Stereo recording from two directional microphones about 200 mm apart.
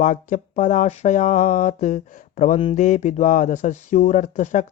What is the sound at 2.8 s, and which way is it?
Speech, 40° left (ahead or behind).